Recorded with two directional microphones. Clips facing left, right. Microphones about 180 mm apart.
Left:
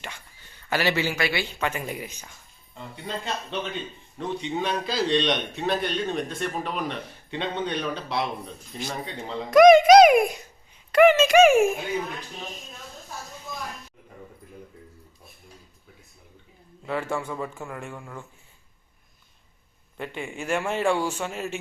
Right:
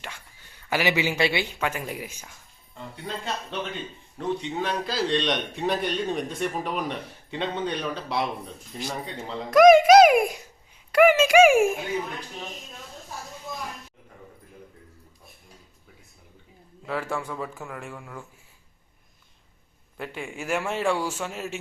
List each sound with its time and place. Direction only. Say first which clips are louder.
0.7 s a man's voice: even; 15° right (ahead or behind)
1.5 s a child's voice: even; 5° right (ahead or behind)
4.2 s a man's voice: even; centre (ahead or behind)
16.8 s a child's voice: left 1 dB; centre (ahead or behind)
20.0 s a child's voice: left 1 dB; centre (ahead or behind)